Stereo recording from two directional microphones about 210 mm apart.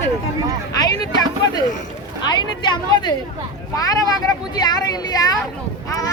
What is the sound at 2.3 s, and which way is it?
Speech, 20° left (ahead or behind).